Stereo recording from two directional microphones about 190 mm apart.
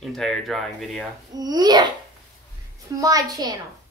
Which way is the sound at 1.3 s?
20° right (ahead or behind).